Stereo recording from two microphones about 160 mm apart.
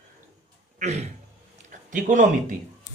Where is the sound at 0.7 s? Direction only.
45° right (ahead or behind).